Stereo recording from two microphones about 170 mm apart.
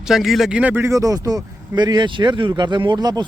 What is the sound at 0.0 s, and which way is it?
Speech, centre (ahead or behind).